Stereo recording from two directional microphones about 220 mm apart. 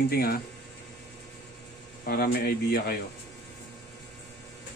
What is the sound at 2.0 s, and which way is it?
Speech, 45° left (ahead or behind).